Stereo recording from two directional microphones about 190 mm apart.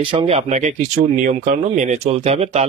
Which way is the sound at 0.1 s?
30° right (ahead or behind).